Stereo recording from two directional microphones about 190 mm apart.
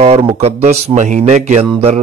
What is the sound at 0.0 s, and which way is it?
A man's voice, 30° right (ahead or behind).